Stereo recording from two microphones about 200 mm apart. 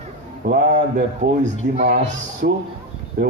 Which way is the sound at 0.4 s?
45° right (ahead or behind).